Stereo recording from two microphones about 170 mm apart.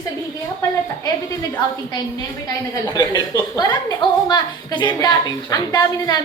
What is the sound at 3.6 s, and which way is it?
A woman's voice, 25° left (ahead or behind).